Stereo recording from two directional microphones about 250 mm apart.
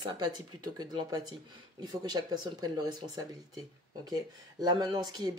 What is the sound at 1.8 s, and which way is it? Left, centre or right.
Speech, centre.